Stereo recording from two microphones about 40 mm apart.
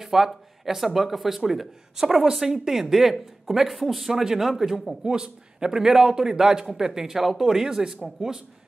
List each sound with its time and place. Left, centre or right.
0.0 s a man's voice: centre
5.0 s a man's voice: centre